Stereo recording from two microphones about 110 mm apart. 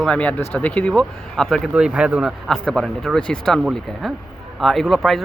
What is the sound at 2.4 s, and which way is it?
Speech, 5° left (ahead or behind).